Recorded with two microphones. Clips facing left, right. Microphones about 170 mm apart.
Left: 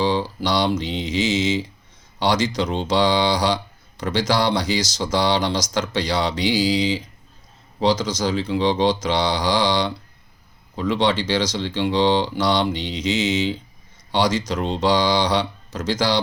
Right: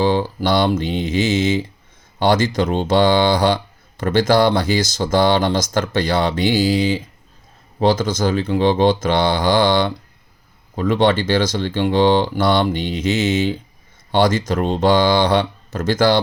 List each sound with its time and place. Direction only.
0.0 s speech: 50° right (ahead or behind)